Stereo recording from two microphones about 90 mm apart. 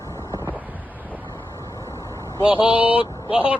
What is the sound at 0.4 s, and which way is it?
Wind noise, 20° right (ahead or behind).